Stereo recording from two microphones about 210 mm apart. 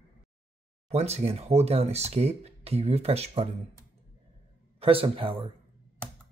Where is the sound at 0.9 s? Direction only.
30° right (ahead or behind).